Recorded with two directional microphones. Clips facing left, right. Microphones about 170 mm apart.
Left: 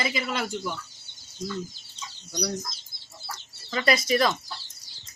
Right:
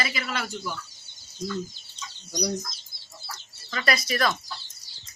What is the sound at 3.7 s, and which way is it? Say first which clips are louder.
Speech: left 4 dB; 20° left (ahead or behind).